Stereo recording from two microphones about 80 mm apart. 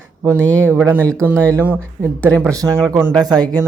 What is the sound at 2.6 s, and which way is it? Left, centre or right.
Speech, right.